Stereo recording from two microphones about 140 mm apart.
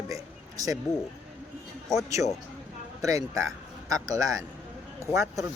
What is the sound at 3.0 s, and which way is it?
A man's voice, 20° right (ahead or behind).